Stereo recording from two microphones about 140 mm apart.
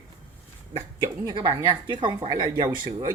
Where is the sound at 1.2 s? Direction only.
30° right (ahead or behind).